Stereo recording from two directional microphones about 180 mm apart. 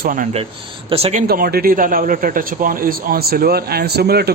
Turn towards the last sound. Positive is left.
turn(degrees=-60)  # may be behind; listen again after turning